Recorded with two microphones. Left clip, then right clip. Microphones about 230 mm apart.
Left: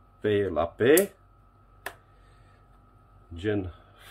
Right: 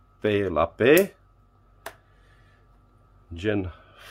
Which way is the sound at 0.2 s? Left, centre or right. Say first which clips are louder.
Right 3 dB; right.